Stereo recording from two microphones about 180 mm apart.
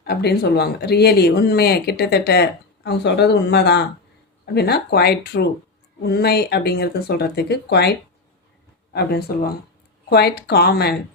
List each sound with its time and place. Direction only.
0.0 s speech: 65° left (ahead or behind)